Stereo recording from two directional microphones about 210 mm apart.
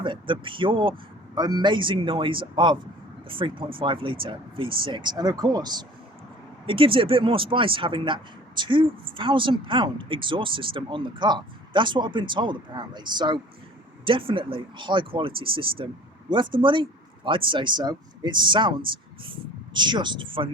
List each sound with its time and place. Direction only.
0.0 s speech: 25° right (ahead or behind)